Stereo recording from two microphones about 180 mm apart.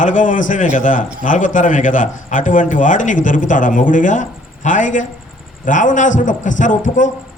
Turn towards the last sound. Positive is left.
turn(degrees=45)  # may be behind; listen again after turning